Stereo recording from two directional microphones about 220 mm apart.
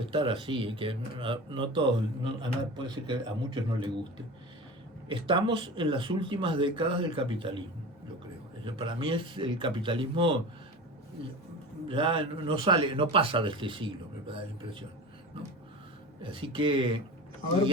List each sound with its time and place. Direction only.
0.1 s speech: 20° right (ahead or behind)
5.0 s speech: 25° right (ahead or behind)
8.6 s speech: 20° right (ahead or behind)
11.9 s speech: 25° right (ahead or behind)
16.2 s speech: 25° right (ahead or behind)